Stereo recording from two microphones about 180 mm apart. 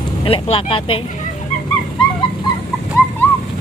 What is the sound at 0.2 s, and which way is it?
Speech, 30° left (ahead or behind).